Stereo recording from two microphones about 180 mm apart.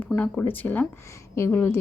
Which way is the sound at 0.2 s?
10° left (ahead or behind).